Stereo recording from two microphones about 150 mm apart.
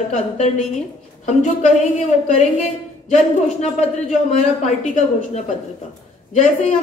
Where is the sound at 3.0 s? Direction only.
50° left (ahead or behind).